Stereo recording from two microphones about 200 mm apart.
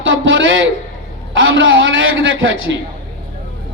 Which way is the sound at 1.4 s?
75° right (ahead or behind).